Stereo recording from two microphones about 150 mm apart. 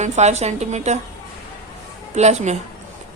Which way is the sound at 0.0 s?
50° right (ahead or behind).